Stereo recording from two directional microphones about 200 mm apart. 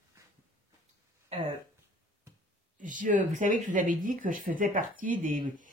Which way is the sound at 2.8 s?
40° right (ahead or behind).